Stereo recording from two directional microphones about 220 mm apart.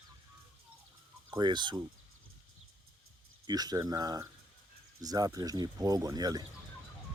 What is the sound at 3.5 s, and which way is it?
Speech, 15° right (ahead or behind).